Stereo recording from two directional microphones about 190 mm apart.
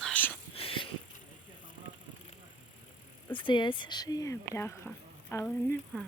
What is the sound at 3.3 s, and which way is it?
Speech, 25° left (ahead or behind).